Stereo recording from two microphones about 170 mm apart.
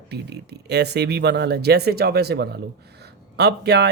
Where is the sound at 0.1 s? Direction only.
75° right (ahead or behind).